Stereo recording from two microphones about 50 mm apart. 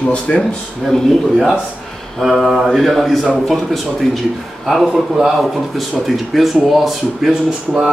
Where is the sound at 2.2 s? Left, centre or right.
Centre.